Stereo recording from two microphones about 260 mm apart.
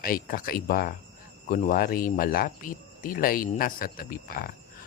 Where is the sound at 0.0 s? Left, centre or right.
Left.